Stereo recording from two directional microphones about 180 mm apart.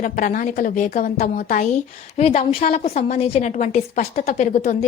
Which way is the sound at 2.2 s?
35° left (ahead or behind).